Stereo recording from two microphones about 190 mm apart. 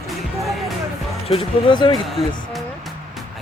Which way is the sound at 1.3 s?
25° left (ahead or behind).